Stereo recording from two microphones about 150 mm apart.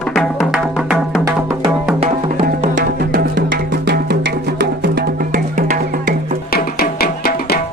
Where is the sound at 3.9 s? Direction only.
90° right.